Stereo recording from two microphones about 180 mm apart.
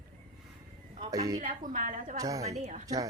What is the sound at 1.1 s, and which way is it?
Speech, 20° right (ahead or behind).